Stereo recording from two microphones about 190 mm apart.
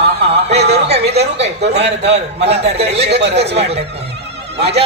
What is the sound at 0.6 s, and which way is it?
Music, 60° right (ahead or behind).